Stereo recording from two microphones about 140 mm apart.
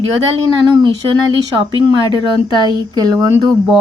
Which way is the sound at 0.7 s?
35° right (ahead or behind).